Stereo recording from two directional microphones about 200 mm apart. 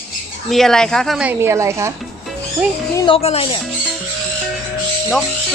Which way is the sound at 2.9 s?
25° left (ahead or behind).